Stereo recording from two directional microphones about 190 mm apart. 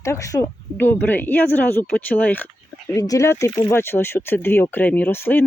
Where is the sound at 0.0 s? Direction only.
15° left (ahead or behind).